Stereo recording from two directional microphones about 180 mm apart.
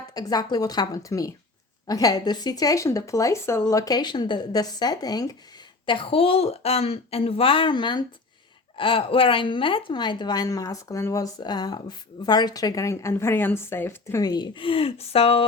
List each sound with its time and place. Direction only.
0.1 s a woman's voice: 20° left (ahead or behind)